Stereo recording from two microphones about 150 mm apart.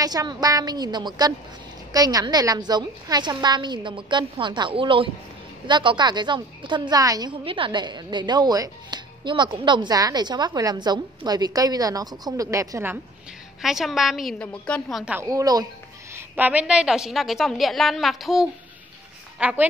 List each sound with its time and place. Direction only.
0.0 s a woman's voice: 25° right (ahead or behind)
13.6 s a woman's voice: centre (ahead or behind)
15.1 s a woman's voice: 20° right (ahead or behind)
16.2 s a woman's voice: 10° right (ahead or behind)